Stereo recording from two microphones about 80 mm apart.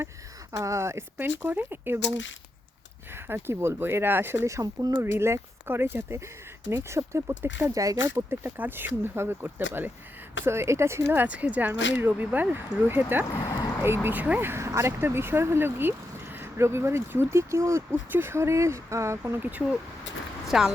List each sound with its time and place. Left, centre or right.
0.5 s speech: right
3.1 s speech: right
4.8 s speech: right
5.1 s speech: right
13.4 s speech: left
13.8 s speech: right
20.5 s a woman's voice: centre